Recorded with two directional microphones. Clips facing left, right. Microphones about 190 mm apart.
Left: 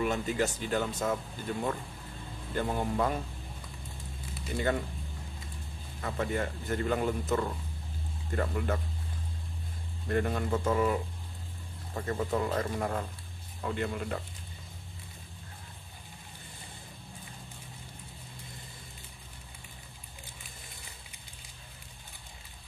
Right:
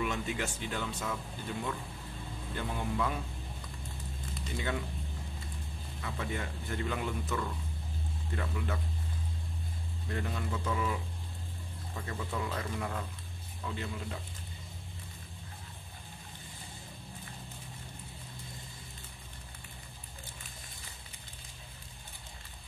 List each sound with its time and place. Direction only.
0.0 s speech: 40° left (ahead or behind)
2.5 s a man's voice: 45° left (ahead or behind)
4.6 s a man's voice: 45° left (ahead or behind)
5.9 s a man's voice: 45° left (ahead or behind)
10.0 s a man's voice: 50° left (ahead or behind)
13.6 s speech: 55° left (ahead or behind)